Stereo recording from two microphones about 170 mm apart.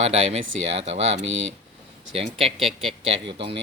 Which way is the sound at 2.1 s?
35° right (ahead or behind).